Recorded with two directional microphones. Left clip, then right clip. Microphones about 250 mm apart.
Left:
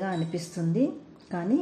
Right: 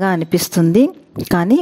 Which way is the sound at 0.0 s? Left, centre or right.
Right.